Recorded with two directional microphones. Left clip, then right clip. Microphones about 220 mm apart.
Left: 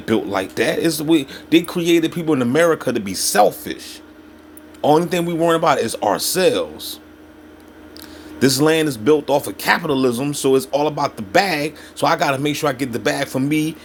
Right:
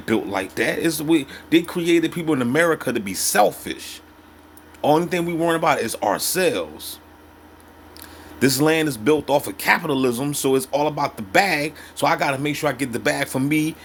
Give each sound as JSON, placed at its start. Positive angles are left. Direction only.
{"t": 0.0, "sound": "speech", "side_deg": 0}
{"t": 8.4, "sound": "speech", "side_deg": -5}